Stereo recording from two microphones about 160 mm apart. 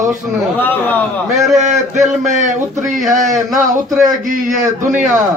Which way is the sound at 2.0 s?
50° right (ahead or behind).